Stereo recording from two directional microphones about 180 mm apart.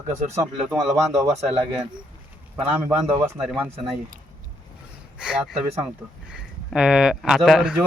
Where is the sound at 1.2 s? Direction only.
20° right (ahead or behind).